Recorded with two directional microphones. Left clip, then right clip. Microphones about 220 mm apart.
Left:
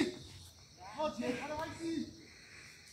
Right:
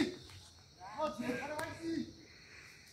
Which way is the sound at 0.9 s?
Centre (ahead or behind).